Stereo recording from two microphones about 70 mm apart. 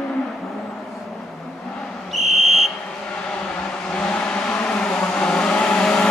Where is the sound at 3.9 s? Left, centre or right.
Centre.